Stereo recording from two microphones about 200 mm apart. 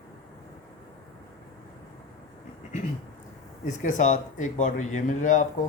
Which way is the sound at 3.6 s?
40° left (ahead or behind).